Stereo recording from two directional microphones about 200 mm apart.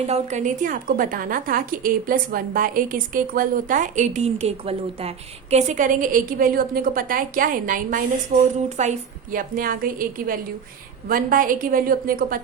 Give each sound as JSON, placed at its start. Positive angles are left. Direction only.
{"t": 0.1, "sound": "a woman's voice", "side_deg": -35}